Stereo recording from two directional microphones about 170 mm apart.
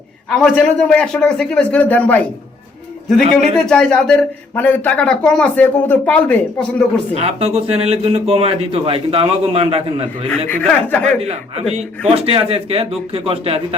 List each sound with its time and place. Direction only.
0.3 s a man's voice: 5° left (ahead or behind)
7.1 s speech: 35° right (ahead or behind)
10.5 s speech: 10° left (ahead or behind)
11.2 s speech: 35° right (ahead or behind)